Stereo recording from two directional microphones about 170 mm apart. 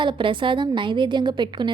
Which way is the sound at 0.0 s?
30° right (ahead or behind).